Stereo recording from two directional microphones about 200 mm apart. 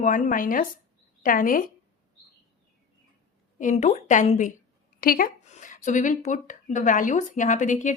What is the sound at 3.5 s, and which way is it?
A woman's voice, 35° left (ahead or behind).